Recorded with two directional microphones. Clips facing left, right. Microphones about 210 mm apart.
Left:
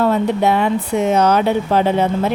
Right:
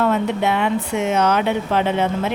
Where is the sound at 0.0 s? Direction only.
35° left (ahead or behind).